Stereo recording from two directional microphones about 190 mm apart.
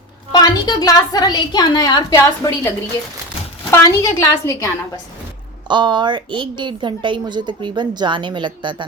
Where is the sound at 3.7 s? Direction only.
15° left (ahead or behind).